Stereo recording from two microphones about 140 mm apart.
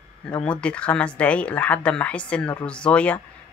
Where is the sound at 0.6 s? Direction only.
10° left (ahead or behind).